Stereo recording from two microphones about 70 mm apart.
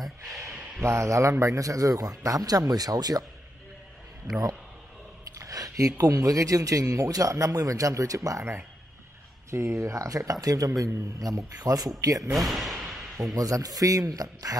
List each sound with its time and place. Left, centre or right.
0.8 s speech: right
5.3 s speech: right
9.8 s speech: right
12.3 s a sound: centre
13.3 s speech: right